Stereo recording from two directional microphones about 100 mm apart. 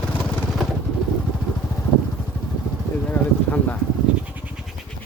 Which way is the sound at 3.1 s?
15° left (ahead or behind).